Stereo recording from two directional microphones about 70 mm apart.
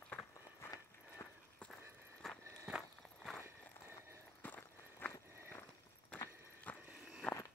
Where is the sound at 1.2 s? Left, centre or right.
Left.